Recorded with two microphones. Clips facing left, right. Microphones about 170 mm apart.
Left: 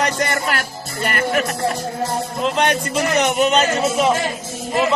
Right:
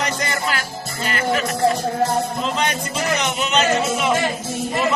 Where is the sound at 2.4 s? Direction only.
55° left (ahead or behind).